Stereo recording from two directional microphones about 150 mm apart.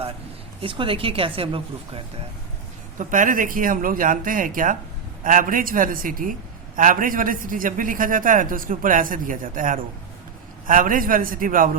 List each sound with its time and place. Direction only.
0.6 s speech: 35° right (ahead or behind)
3.0 s a man's voice: 60° right (ahead or behind)